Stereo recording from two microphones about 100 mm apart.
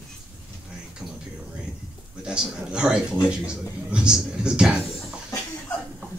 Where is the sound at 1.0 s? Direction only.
10° right (ahead or behind).